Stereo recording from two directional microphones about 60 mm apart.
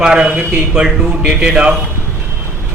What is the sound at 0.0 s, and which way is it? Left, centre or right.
A man's voice, centre.